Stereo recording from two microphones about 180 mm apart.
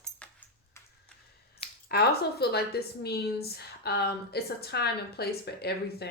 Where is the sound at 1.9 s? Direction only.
60° left (ahead or behind).